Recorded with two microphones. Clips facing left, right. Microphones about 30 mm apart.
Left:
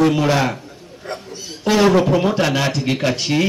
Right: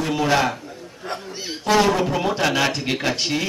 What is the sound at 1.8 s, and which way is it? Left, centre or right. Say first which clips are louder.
Speech: left 6 dB; centre.